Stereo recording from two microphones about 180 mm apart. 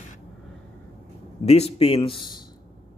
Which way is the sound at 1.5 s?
35° left (ahead or behind).